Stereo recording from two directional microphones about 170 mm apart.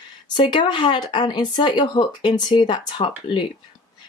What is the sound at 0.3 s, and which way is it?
Speech, 25° left (ahead or behind).